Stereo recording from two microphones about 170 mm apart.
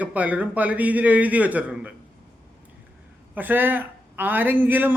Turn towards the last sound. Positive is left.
turn(degrees=-10)  # may be behind; listen again after turning